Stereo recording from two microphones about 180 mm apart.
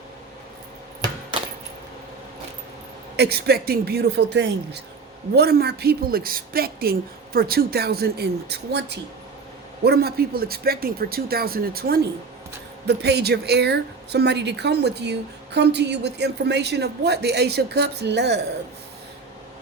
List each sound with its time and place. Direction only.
3.2 s speech: 60° right (ahead or behind)
13.0 s a woman's voice: 65° right (ahead or behind)